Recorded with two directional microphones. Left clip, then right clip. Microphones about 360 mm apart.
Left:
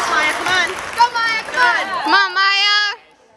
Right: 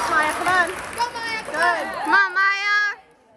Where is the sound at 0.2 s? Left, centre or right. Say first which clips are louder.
Left 1 dB; centre.